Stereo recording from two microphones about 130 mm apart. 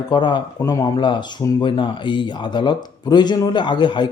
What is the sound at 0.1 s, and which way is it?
Speech, 35° left (ahead or behind).